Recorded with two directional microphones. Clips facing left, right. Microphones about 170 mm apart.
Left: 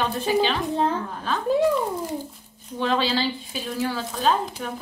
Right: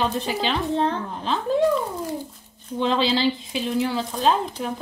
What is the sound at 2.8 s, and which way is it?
Speech, 20° right (ahead or behind).